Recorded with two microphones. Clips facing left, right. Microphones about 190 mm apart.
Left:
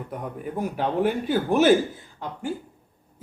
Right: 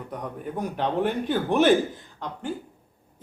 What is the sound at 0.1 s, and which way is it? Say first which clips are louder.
A man's voice: even; 5° left (ahead or behind).